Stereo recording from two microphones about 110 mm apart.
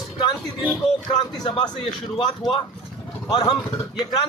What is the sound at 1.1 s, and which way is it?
A man's voice, 55° left (ahead or behind).